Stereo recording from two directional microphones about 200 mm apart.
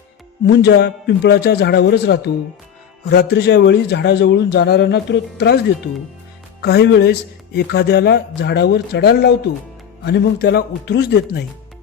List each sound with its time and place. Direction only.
0.4 s speech: 60° left (ahead or behind)